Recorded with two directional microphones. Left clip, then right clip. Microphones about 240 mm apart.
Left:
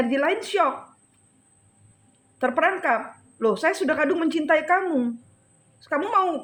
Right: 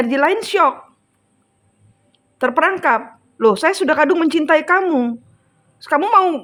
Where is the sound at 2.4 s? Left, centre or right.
Right.